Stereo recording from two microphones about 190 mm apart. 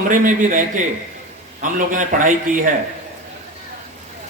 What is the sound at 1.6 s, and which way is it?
A man's voice, 45° right (ahead or behind).